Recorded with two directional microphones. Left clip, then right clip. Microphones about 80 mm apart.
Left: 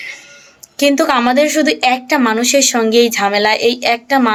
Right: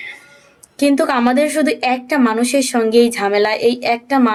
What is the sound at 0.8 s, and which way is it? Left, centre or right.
A woman's voice, right.